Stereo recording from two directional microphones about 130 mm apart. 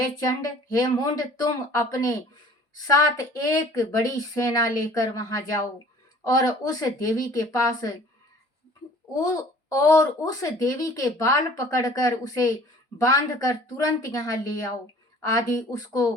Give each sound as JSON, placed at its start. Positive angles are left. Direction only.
{"t": 0.0, "sound": "speech", "side_deg": 25}
{"t": 3.3, "sound": "speech", "side_deg": 30}
{"t": 9.1, "sound": "speech", "side_deg": 25}
{"t": 15.4, "sound": "speech", "side_deg": 25}